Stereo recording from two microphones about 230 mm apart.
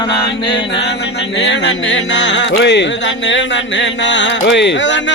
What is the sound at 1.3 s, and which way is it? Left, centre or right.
Speech, left.